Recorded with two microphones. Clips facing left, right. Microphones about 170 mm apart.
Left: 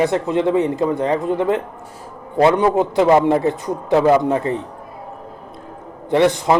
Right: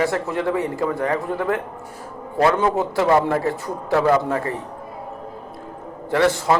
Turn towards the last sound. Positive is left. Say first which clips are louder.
# left 3 dB
turn(degrees=20)  # may be behind; listen again after turning